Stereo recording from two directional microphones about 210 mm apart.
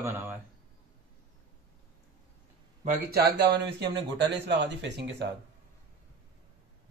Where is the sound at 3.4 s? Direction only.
50° right (ahead or behind).